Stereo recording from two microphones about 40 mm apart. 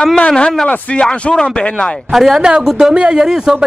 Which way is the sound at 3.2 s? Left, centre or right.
Centre.